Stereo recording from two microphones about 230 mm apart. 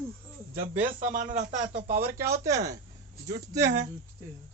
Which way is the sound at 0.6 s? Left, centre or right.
Right.